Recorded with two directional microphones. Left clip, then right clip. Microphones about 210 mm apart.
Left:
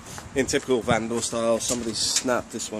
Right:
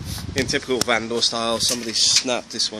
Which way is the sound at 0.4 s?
Centre (ahead or behind).